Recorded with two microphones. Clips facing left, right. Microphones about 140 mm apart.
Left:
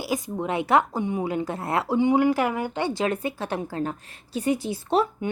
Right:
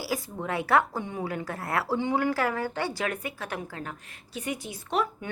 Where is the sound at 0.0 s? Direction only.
20° left (ahead or behind).